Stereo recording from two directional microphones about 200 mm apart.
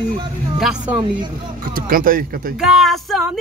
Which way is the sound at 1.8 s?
45° right (ahead or behind).